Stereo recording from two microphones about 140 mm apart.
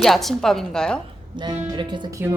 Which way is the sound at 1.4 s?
30° right (ahead or behind).